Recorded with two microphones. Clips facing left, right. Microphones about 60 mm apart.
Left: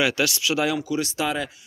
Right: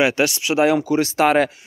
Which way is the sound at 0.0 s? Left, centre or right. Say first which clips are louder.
Right 4 dB; right.